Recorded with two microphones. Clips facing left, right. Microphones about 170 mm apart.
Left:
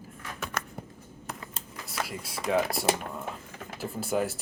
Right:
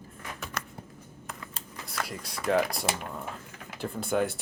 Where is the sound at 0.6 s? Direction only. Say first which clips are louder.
Left 3 dB; 50° left (ahead or behind).